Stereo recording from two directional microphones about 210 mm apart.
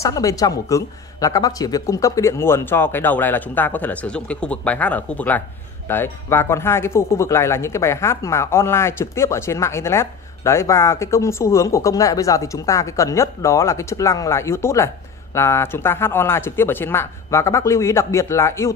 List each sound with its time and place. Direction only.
0.0 s speech: 15° left (ahead or behind)